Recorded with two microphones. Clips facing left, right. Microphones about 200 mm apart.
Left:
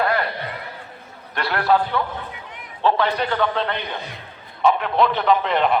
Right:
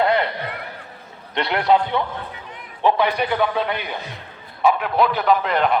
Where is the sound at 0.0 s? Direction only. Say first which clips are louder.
Right 3 dB; 20° right (ahead or behind).